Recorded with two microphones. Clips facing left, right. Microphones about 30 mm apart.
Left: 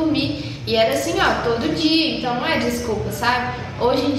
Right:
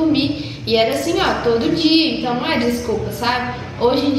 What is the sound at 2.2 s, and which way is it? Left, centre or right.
Speech, centre.